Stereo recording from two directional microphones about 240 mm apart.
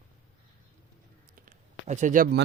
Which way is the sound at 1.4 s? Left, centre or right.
Right.